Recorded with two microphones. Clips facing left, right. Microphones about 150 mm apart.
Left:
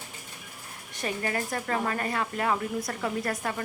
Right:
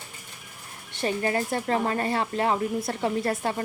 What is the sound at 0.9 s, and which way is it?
Speech, 30° right (ahead or behind).